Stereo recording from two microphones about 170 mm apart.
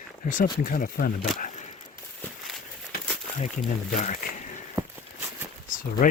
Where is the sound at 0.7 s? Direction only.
55° left (ahead or behind).